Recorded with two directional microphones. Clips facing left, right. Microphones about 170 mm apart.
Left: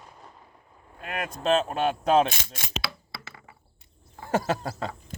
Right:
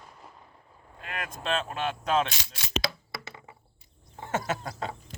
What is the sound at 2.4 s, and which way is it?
Mechanisms, 55° left (ahead or behind).